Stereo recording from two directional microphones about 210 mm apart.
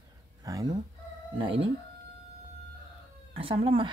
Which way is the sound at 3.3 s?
25° right (ahead or behind).